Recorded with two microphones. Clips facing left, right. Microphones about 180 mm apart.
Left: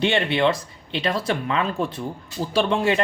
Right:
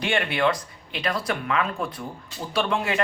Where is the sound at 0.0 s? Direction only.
25° left (ahead or behind).